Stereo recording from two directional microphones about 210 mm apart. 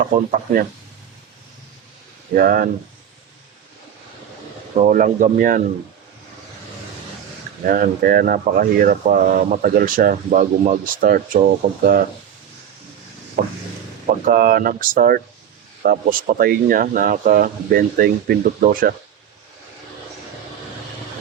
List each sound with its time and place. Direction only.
0.0 s speech: 40° right (ahead or behind)
2.3 s speech: 45° right (ahead or behind)
4.8 s speech: 40° right (ahead or behind)
7.7 s speech: 45° right (ahead or behind)
14.3 s speech: 45° right (ahead or behind)